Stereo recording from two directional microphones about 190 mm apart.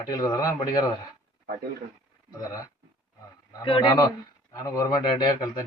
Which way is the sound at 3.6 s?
25° left (ahead or behind).